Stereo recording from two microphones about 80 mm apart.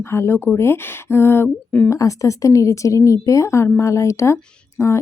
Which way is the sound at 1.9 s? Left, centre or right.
Left.